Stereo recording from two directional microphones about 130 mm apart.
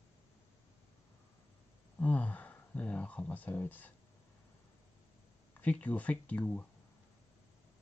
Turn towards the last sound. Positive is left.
turn(degrees=10)  # may be behind; listen again after turning